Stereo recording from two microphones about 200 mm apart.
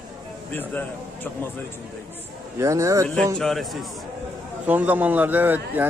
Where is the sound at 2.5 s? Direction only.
15° right (ahead or behind).